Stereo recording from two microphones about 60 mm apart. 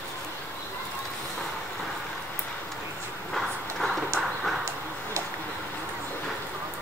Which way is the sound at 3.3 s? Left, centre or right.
Centre.